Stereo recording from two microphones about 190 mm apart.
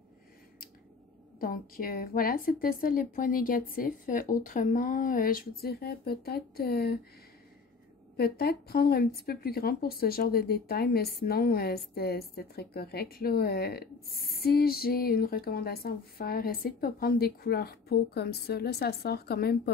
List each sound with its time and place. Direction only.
1.4 s a woman's voice: 50° left (ahead or behind)
8.2 s speech: 55° left (ahead or behind)